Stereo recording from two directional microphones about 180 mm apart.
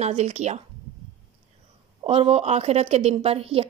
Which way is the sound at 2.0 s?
30° right (ahead or behind).